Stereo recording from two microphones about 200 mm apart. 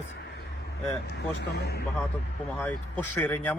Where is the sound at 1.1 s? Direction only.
55° left (ahead or behind).